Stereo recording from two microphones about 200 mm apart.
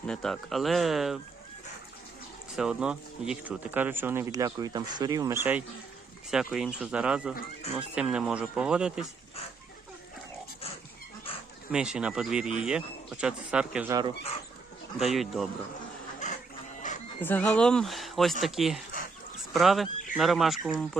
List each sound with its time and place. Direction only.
0.1 s speech: centre (ahead or behind)
2.6 s speech: 5° right (ahead or behind)
11.7 s speech: 5° right (ahead or behind)
14.9 s speech: centre (ahead or behind)
16.8 s music: 40° left (ahead or behind)
17.2 s speech: 10° left (ahead or behind)